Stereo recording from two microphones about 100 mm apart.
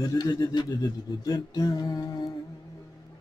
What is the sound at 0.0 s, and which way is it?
Music, 40° left (ahead or behind).